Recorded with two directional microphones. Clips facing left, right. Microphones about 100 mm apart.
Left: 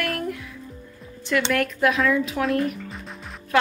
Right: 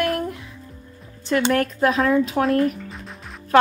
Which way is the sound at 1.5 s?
35° right (ahead or behind).